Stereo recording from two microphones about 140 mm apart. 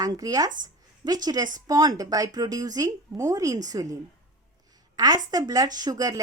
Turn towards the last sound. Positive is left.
turn(degrees=-25)  # may be behind; listen again after turning